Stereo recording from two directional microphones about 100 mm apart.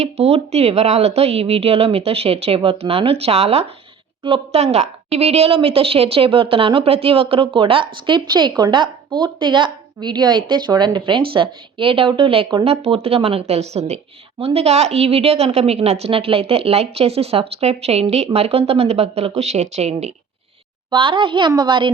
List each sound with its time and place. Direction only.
0.0 s speech: 90° right
4.2 s a woman's voice: 75° right (ahead or behind)
12.6 s speech: 80° right
20.9 s a woman's voice: 55° right (ahead or behind)